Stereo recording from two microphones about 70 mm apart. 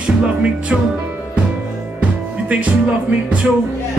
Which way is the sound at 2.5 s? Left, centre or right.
Centre.